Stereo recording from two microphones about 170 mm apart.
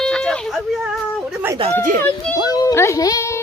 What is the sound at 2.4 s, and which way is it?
Speech, 20° left (ahead or behind).